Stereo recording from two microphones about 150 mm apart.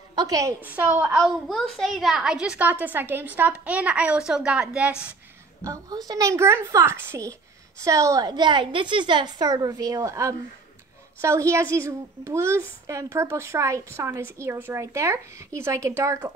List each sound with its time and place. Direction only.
0.1 s a woman's voice: 25° right (ahead or behind)
0.7 s a woman's voice: 10° right (ahead or behind)
5.6 s a woman's voice: 25° right (ahead or behind)